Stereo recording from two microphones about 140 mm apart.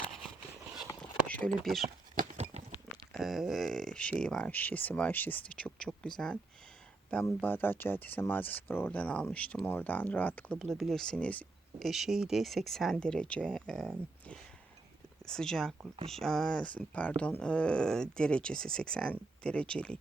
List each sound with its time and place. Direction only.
1.3 s a sound: 10° left (ahead or behind)
1.5 s speech: centre (ahead or behind)
2.1 s clip-clop: 50° right (ahead or behind)
3.1 s speech: centre (ahead or behind)
10.6 s speech: centre (ahead or behind)
11.9 s speech: centre (ahead or behind)
15.3 s speech: 5° left (ahead or behind)